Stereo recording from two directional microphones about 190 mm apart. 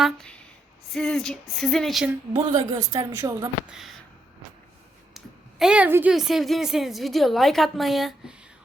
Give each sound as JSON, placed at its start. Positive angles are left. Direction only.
{"t": 0.0, "sound": "a woman's voice", "side_deg": 5}
{"t": 2.3, "sound": "a woman's voice", "side_deg": -20}
{"t": 3.7, "sound": "a woman's voice", "side_deg": 0}
{"t": 5.1, "sound": "a woman's voice", "side_deg": 0}